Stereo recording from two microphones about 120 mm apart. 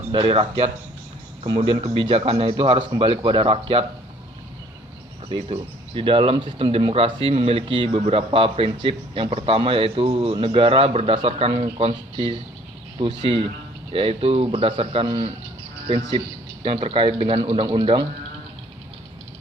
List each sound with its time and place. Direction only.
0.1 s a man's voice: 45° right (ahead or behind)
5.3 s a man's voice: 50° right (ahead or behind)
7.9 s a man's voice: 55° right (ahead or behind)
16.6 s a man's voice: 50° right (ahead or behind)